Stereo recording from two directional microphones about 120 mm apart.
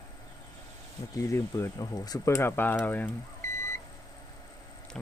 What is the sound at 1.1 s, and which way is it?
Speech, 25° left (ahead or behind).